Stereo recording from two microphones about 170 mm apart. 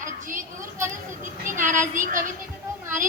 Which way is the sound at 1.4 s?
50° right (ahead or behind).